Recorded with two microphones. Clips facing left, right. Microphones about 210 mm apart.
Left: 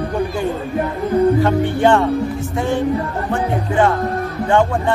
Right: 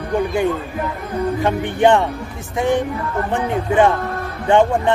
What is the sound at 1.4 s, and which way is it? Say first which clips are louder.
Speech: left 1 dB; 15° right (ahead or behind).